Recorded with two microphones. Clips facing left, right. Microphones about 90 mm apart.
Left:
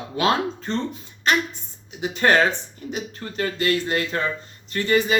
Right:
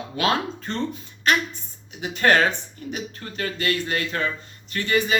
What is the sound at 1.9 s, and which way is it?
Speech, 25° left (ahead or behind).